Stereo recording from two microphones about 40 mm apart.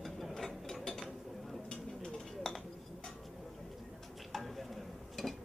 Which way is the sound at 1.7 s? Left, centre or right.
Centre.